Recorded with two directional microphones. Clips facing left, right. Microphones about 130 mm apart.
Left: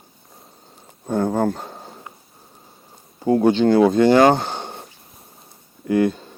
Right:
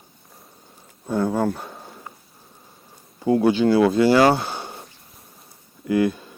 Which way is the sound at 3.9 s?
45° left (ahead or behind).